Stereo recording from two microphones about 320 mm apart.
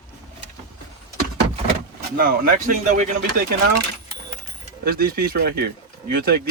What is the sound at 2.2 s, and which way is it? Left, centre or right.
Speech, right.